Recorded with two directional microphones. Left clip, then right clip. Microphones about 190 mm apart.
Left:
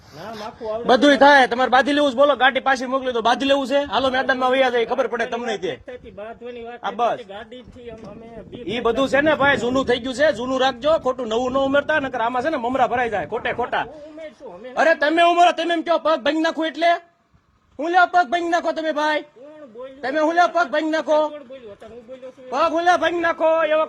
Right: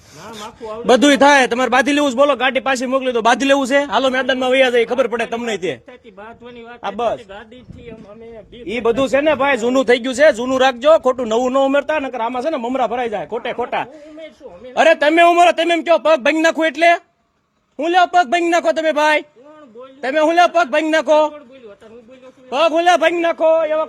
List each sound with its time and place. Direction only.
0.3 s speech: 55° right (ahead or behind)
5.9 s speech: 25° right (ahead or behind)
6.8 s a man's voice: 50° right (ahead or behind)
8.6 s a man's voice: 45° right (ahead or behind)
22.4 s speech: 60° right (ahead or behind)